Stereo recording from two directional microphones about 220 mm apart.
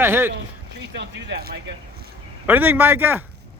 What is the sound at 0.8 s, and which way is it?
Speech, 50° right (ahead or behind).